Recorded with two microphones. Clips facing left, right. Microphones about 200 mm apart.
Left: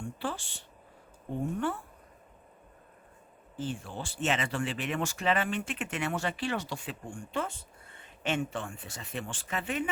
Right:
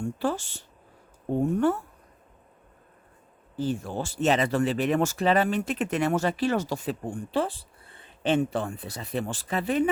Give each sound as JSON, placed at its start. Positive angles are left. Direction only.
{"t": 0.0, "sound": "speech", "side_deg": -40}
{"t": 3.5, "sound": "speech", "side_deg": -40}